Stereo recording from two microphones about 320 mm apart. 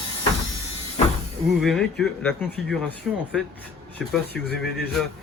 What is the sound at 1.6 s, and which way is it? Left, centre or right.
Speech, centre.